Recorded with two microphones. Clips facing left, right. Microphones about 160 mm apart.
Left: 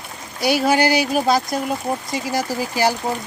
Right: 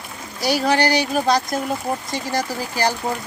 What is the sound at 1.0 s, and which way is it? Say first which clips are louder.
Speech: left 1 dB; 10° left (ahead or behind).